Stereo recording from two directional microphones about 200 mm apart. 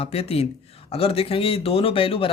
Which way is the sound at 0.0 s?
30° left (ahead or behind).